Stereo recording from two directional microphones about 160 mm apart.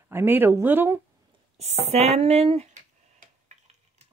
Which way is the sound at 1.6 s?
45° right (ahead or behind).